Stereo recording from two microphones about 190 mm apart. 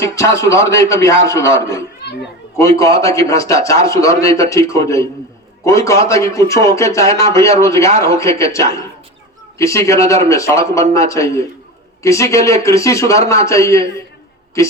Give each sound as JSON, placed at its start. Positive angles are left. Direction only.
{"t": 0.0, "sound": "speech", "side_deg": 15}
{"t": 9.6, "sound": "speech", "side_deg": 15}